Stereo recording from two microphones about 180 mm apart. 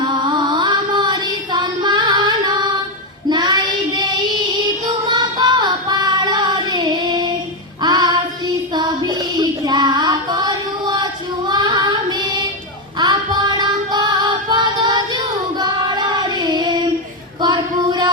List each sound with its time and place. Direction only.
0.0 s a sound: 25° right (ahead or behind)
3.2 s child singing: 25° right (ahead or behind)
5.0 s female singing: 25° right (ahead or behind)
7.8 s child singing: 25° right (ahead or behind)
13.0 s music: 25° right (ahead or behind)
17.4 s female singing: 25° right (ahead or behind)